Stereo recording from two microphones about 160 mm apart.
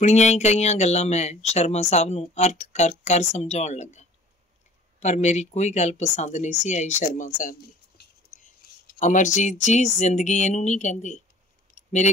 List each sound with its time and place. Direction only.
0.0 s speech: 45° left (ahead or behind)
5.0 s speech: 45° left (ahead or behind)
8.0 s whispering: 55° left (ahead or behind)
9.0 s speech: 50° left (ahead or behind)
11.7 s clicking: 50° left (ahead or behind)